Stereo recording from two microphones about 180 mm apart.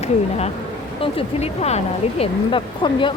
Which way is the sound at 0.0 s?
35° left (ahead or behind).